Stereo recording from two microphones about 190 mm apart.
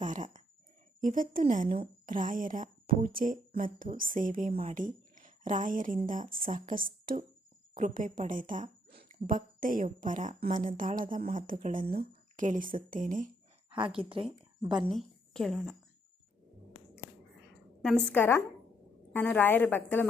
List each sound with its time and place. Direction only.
0.0 s a sound: 40° right (ahead or behind)
1.0 s a woman's voice: 45° right (ahead or behind)
8.9 s a sound: 50° right (ahead or behind)
10.0 s a woman's voice: 40° right (ahead or behind)
13.7 s speech: 25° right (ahead or behind)
14.9 s a woman's voice: centre (ahead or behind)
17.8 s a woman's voice: 5° left (ahead or behind)